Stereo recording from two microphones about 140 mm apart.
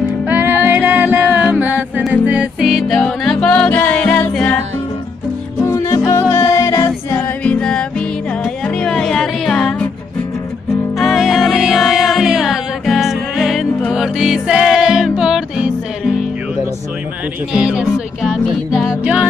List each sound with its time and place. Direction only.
0.3 s music: 15° right (ahead or behind); by 4.6 s 5° left (ahead or behind)
5.6 s music: 20° left (ahead or behind)
11.0 s music: centre (ahead or behind)
17.5 s music: 5° right (ahead or behind)